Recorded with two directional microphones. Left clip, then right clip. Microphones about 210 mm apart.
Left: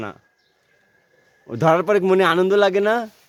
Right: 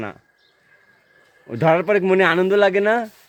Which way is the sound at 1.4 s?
15° left (ahead or behind).